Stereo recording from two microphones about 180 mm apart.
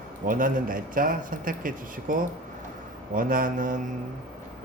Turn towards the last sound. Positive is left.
turn(degrees=-50)  # may be behind; listen again after turning